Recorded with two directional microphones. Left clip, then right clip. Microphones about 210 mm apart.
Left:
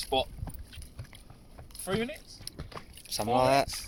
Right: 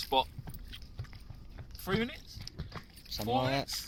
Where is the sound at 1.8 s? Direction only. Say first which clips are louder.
Left 2 dB; 5° left (ahead or behind).